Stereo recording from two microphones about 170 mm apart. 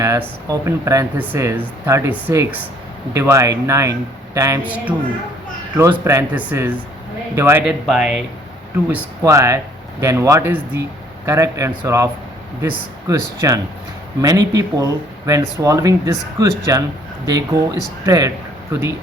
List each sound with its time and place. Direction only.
0.0 s speech: 20° right (ahead or behind); by 8.2 s 5° right (ahead or behind)
8.9 s speech: 15° right (ahead or behind)